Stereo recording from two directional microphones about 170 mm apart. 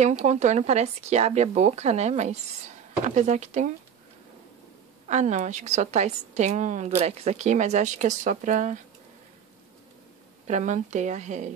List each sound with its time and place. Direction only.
0.0 s a woman's voice: 40° right (ahead or behind)
5.0 s a woman's voice: 45° right (ahead or behind)
10.4 s a woman's voice: 45° right (ahead or behind)